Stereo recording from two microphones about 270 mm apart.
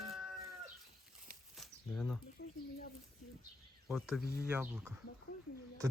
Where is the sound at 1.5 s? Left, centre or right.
Centre.